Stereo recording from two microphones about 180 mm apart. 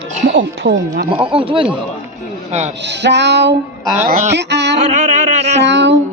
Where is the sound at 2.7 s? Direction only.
75° right (ahead or behind).